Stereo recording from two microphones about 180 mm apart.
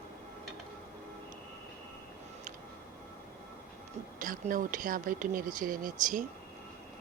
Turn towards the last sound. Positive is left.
turn(degrees=-45)  # may be behind; listen again after turning